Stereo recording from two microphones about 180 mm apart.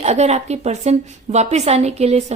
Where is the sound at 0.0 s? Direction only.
40° right (ahead or behind).